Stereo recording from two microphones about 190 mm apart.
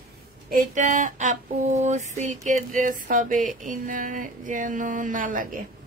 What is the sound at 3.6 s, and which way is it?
A woman's voice, 45° right (ahead or behind).